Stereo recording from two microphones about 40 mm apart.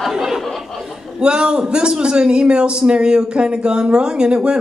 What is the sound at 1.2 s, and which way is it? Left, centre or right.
A man's voice, right.